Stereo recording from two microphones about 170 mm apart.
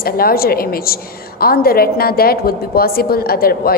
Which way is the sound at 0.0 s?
60° left (ahead or behind).